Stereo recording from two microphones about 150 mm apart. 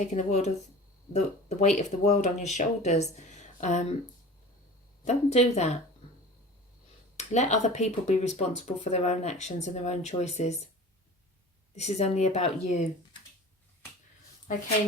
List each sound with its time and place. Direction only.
0.0 s speech: 50° left (ahead or behind)
5.0 s speech: 45° left (ahead or behind)
7.2 s speech: 50° left (ahead or behind)
11.8 s speech: 45° left (ahead or behind)